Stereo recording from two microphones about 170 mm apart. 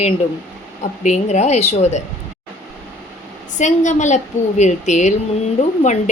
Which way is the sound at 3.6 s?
45° left (ahead or behind).